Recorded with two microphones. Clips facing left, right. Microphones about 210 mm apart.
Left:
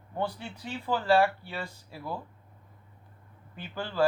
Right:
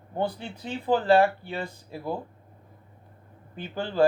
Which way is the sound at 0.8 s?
20° right (ahead or behind).